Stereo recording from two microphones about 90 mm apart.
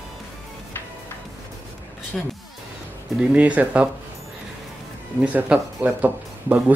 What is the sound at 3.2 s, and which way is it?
Speech, 15° right (ahead or behind).